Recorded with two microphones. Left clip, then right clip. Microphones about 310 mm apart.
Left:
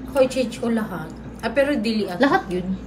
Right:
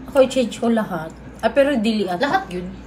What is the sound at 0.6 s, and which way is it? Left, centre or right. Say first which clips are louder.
A woman's voice: right 4 dB; centre.